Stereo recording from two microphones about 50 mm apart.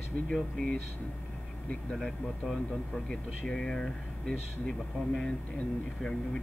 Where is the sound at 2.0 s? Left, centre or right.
Centre.